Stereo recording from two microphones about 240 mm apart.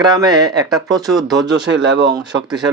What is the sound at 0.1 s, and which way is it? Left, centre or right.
Speech, centre.